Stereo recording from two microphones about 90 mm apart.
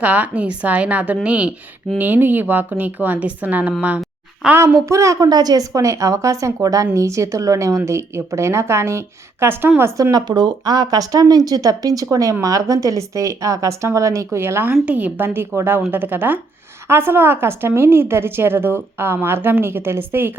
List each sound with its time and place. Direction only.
0.0 s a woman's voice: 15° right (ahead or behind)
4.5 s a woman's voice: 35° right (ahead or behind)
10.0 s a woman's voice: 45° right (ahead or behind); by 20.3 s 25° right (ahead or behind)